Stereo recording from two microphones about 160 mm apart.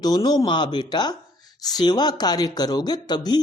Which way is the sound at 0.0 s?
25° left (ahead or behind).